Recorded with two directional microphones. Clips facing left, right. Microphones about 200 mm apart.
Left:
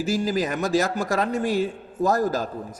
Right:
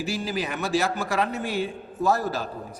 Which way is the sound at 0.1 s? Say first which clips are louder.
Left 8 dB; 45° left (ahead or behind).